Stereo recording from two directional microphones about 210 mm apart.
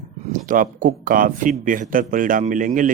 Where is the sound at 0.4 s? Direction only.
40° right (ahead or behind).